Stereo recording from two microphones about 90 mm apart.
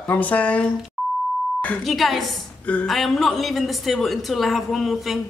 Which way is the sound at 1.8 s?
Centre (ahead or behind).